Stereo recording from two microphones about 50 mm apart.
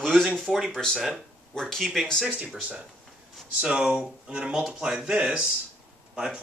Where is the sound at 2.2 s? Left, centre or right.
Right.